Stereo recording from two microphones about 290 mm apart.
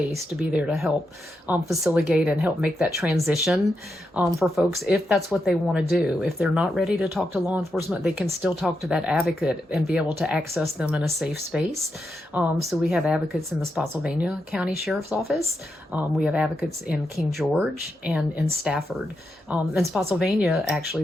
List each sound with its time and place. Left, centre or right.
0.3 s speech: centre